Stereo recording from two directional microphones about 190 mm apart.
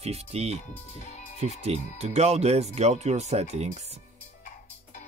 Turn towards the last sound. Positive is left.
turn(degrees=-35)  # may be behind; listen again after turning